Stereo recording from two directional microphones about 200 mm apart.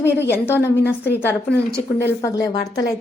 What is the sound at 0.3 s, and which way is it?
A woman's voice, 10° left (ahead or behind).